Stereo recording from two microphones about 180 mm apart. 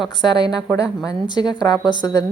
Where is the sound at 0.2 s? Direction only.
25° left (ahead or behind).